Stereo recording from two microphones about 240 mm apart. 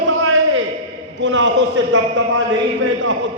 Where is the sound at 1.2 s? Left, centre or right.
Right.